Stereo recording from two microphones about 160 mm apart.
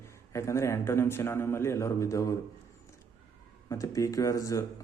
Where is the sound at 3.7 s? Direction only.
20° left (ahead or behind).